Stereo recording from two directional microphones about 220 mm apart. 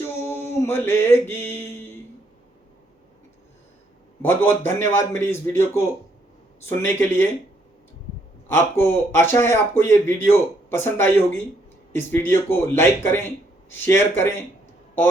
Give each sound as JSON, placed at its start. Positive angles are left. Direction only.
{"t": 0.2, "sound": "music", "side_deg": 10}
{"t": 4.2, "sound": "speech", "side_deg": 10}
{"t": 8.4, "sound": "speech", "side_deg": 10}